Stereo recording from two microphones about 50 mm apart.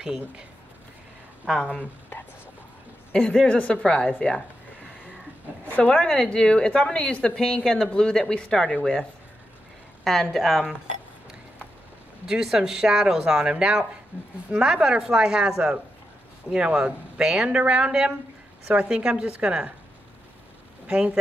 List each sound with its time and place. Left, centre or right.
0.0 s speech: centre
1.6 s a woman's voice: left
3.1 s a woman's voice: left
5.7 s a woman's voice: left
5.9 s speech: centre
10.0 s a woman's voice: centre
12.3 s speech: centre; by 14.3 s right
14.6 s a woman's voice: centre
20.8 s speech: right